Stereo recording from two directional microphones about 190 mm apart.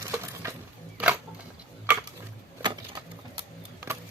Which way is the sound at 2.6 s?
25° right (ahead or behind).